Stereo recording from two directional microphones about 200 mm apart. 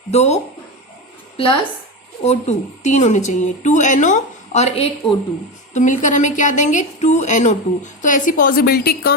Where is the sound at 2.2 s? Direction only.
35° left (ahead or behind).